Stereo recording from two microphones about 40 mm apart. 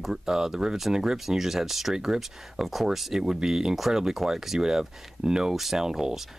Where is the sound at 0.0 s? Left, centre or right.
Centre.